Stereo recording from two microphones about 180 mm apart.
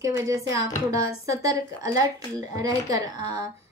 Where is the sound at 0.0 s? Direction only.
15° right (ahead or behind).